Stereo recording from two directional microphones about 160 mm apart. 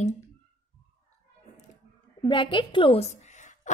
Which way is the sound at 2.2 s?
30° left (ahead or behind).